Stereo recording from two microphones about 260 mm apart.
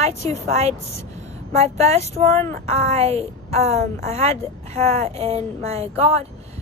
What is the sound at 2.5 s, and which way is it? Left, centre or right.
Speech, right.